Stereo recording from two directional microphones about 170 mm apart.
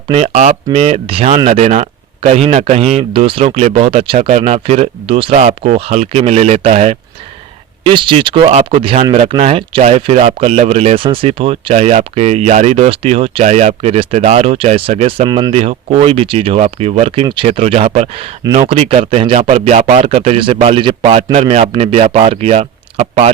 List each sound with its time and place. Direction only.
0.1 s speech: 45° right (ahead or behind)
7.9 s speech: 30° right (ahead or behind)